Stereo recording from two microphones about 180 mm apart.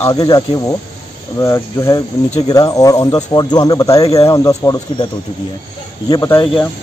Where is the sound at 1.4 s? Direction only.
15° left (ahead or behind).